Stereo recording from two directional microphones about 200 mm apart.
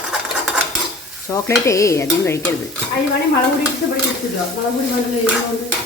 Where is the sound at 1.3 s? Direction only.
15° left (ahead or behind).